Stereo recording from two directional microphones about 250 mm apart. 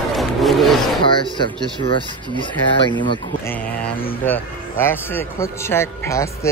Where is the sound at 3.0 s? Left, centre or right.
Centre.